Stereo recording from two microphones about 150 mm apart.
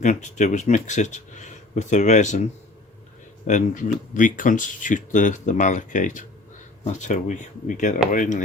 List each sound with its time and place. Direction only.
0.0 s speech: 55° left (ahead or behind)